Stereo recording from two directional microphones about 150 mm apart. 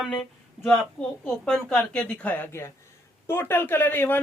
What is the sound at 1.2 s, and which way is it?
A woman's voice, 5° left (ahead or behind).